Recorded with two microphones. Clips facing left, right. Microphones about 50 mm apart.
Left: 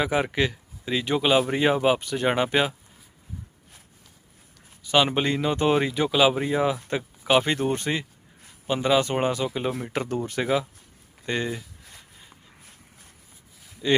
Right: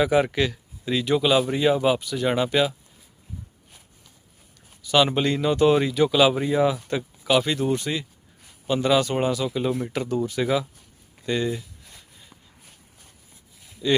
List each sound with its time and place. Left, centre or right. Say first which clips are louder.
0.0 s speech: right 3 dB; centre; by 2.7 s left
4.8 s speech: right 1 dB; left
6.1 s speech: even; centre; by 8.0 s left
8.6 s speech: right 1 dB; centre
9.9 s speech: right 2 dB; left
13.8 s speech: even; left